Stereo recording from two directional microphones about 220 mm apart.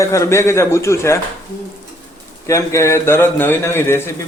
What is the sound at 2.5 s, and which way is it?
A man's voice, 15° left (ahead or behind).